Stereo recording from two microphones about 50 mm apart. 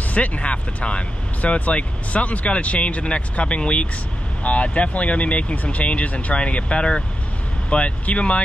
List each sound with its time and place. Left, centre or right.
0.1 s speech: left